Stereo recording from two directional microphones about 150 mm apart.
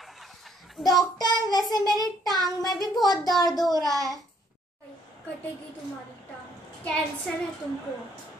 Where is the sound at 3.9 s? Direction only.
25° left (ahead or behind).